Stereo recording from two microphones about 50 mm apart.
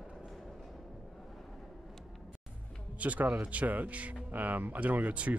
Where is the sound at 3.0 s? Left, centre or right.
Right.